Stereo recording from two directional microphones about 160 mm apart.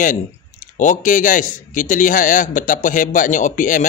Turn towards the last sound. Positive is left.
turn(degrees=55)  # may be behind; listen again after turning